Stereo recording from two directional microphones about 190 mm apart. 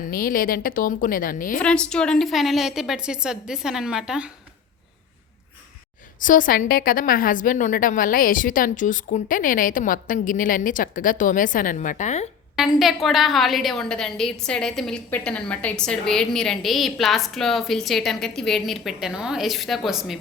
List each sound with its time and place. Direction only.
0.1 s a woman's voice: 50° left (ahead or behind)
1.6 s a woman's voice: 5° left (ahead or behind)
6.1 s a woman's voice: 45° left (ahead or behind)
12.5 s a woman's voice: centre (ahead or behind)